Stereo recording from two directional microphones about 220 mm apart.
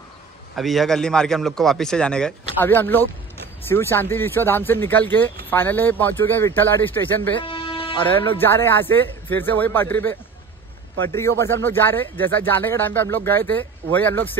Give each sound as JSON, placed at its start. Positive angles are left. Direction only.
{"t": 0.6, "sound": "a man's voice", "side_deg": 0}
{"t": 7.3, "sound": "music", "side_deg": 25}
{"t": 8.0, "sound": "speech", "side_deg": 15}